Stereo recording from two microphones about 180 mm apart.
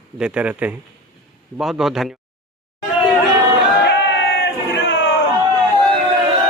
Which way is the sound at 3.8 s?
75° left (ahead or behind).